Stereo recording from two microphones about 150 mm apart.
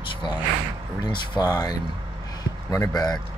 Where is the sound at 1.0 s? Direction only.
25° left (ahead or behind).